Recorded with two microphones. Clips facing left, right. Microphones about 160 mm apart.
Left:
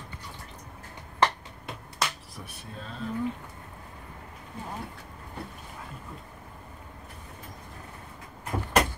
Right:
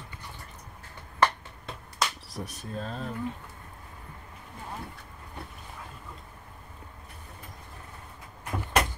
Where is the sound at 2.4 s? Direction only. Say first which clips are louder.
Right 7 dB; 40° right (ahead or behind).